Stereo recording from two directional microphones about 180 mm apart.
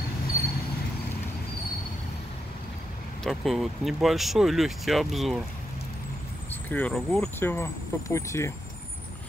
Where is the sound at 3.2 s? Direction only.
Centre (ahead or behind).